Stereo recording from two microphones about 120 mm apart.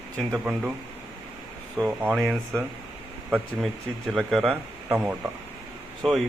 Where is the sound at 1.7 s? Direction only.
15° right (ahead or behind).